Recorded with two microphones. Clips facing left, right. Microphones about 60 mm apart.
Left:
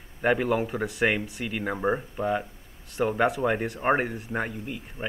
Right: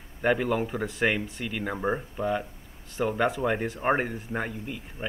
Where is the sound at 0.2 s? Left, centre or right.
Centre.